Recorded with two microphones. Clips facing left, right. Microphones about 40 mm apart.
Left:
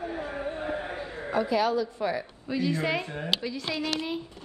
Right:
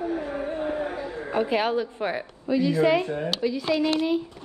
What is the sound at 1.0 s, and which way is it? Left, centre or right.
A man's voice, right.